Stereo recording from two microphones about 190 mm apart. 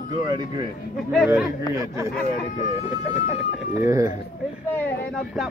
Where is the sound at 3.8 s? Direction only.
15° right (ahead or behind).